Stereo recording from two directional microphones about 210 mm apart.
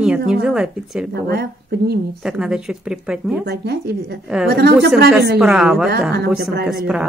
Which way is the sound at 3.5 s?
50° right (ahead or behind).